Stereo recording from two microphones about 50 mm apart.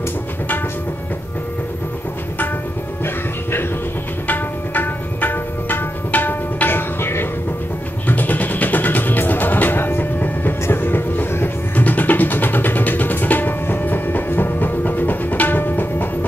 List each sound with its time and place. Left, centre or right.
4.3 s music: left
8.1 s music: left